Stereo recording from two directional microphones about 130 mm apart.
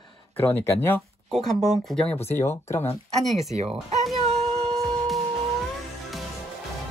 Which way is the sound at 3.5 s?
55° right (ahead or behind).